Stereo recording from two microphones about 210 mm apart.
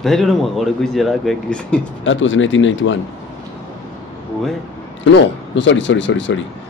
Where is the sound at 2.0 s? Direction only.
65° left (ahead or behind).